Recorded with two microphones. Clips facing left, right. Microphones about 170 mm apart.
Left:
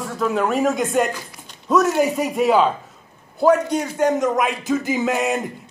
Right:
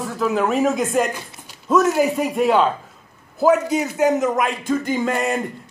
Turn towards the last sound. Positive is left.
turn(degrees=0)  # may be behind; listen again after turning